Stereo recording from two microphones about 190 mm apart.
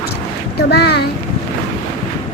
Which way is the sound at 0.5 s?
60° left (ahead or behind).